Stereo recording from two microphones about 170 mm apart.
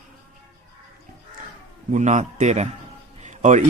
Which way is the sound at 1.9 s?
45° right (ahead or behind).